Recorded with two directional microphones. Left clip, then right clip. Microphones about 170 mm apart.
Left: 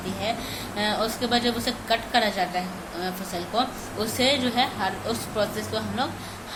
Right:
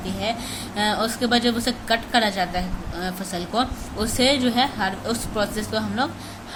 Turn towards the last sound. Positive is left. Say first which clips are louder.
# right 3 dB
turn(degrees=-35)  # may be behind; listen again after turning